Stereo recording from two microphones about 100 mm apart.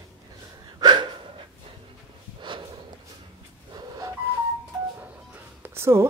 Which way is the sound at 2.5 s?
55° right (ahead or behind).